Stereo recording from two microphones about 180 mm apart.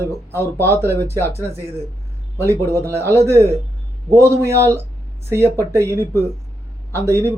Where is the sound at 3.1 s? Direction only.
15° right (ahead or behind).